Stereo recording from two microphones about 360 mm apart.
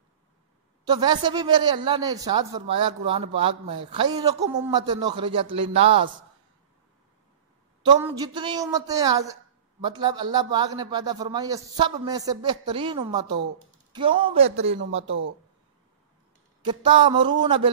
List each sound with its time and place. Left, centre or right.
0.8 s a man's voice: centre
7.8 s a man's voice: centre
15.0 s speech: right
16.6 s a man's voice: centre